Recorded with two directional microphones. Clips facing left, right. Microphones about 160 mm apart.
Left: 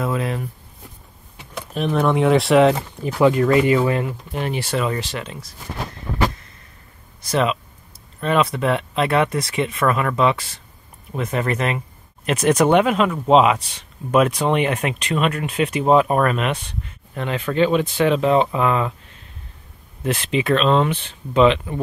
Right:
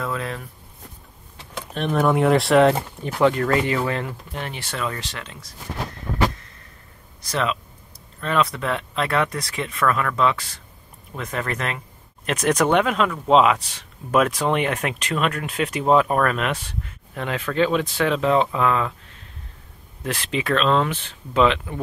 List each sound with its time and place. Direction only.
0.0 s speech: 15° left (ahead or behind)
1.5 s speech: centre (ahead or behind)
7.2 s speech: 10° left (ahead or behind)
11.3 s speech: 10° left (ahead or behind)
20.0 s speech: 5° left (ahead or behind)